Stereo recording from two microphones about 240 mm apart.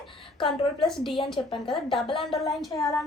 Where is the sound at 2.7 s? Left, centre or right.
Centre.